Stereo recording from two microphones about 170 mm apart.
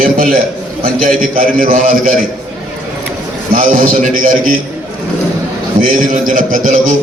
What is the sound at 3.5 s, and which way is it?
A man's voice, 50° right (ahead or behind).